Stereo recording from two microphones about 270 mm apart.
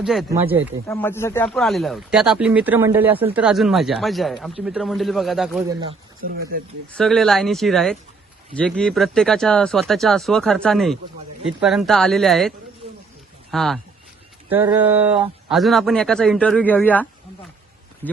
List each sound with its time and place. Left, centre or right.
0.0 s speech: centre
0.9 s speech: centre
6.2 s speech: right
6.9 s speech: centre